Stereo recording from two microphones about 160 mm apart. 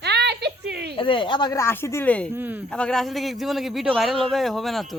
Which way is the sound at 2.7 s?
5° left (ahead or behind).